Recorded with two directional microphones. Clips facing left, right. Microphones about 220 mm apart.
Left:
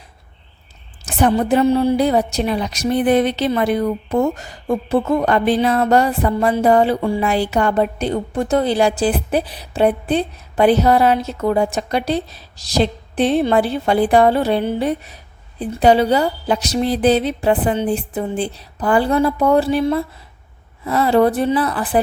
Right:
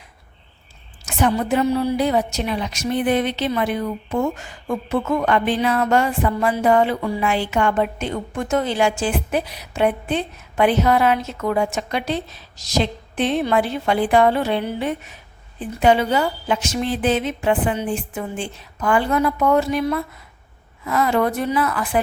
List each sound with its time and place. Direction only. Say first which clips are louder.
1.0 s a woman's voice: left 4 dB; 35° left (ahead or behind)